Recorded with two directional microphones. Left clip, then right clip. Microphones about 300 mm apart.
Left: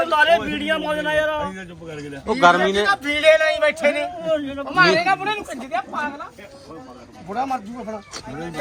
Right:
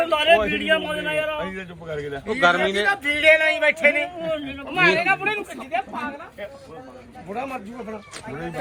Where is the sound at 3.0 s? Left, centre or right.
Centre.